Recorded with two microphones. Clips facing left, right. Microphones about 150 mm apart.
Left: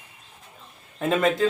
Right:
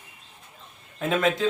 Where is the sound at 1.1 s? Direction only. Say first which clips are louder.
Left 2 dB; 5° left (ahead or behind).